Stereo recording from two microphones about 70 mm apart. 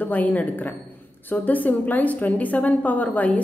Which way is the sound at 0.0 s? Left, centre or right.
Left.